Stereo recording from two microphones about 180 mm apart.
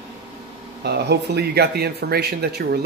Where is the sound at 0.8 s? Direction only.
65° right (ahead or behind).